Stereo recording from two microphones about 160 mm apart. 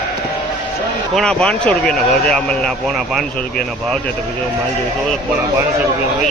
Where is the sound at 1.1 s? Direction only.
5° left (ahead or behind).